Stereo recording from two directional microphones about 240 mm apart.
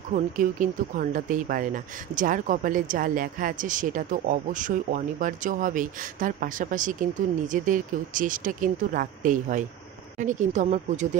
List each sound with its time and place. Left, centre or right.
0.1 s speech: right